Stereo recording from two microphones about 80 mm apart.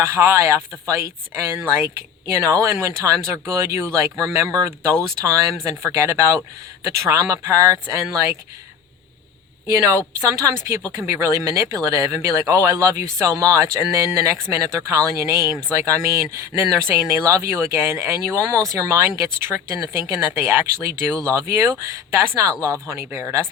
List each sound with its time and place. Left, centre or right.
0.0 s speech: right
9.7 s speech: right